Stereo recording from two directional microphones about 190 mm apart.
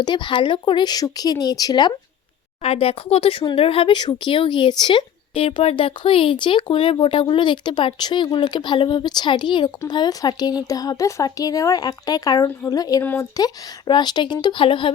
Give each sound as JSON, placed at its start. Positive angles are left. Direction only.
{"t": 0.0, "sound": "speech", "side_deg": 25}